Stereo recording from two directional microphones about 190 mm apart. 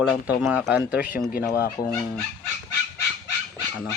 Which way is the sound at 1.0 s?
50° left (ahead or behind).